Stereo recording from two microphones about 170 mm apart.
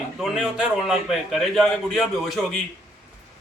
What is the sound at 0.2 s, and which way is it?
A man's voice, 5° right (ahead or behind).